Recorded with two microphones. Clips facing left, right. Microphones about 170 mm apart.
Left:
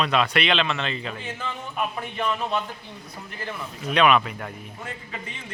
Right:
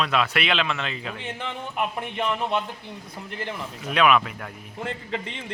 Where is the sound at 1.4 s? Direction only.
20° right (ahead or behind).